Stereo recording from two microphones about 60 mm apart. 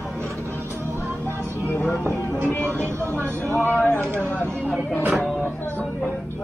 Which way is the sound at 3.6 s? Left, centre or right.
Left.